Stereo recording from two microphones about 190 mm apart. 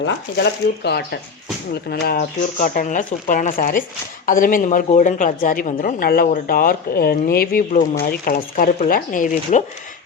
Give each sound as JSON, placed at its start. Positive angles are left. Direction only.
{"t": 0.0, "sound": "a woman's voice", "side_deg": 60}